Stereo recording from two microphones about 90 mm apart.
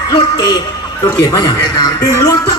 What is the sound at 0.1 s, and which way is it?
Speech, 50° left (ahead or behind).